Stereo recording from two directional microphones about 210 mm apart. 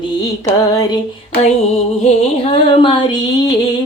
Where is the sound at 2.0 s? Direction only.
25° left (ahead or behind).